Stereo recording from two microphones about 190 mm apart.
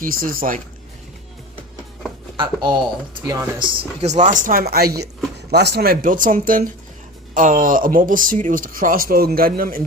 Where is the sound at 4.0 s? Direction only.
40° right (ahead or behind).